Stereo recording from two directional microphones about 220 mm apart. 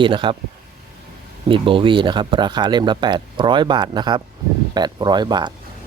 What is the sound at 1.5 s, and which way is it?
Speech, 25° right (ahead or behind).